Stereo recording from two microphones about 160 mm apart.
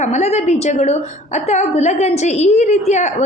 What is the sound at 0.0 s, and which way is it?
A woman's voice, 45° left (ahead or behind).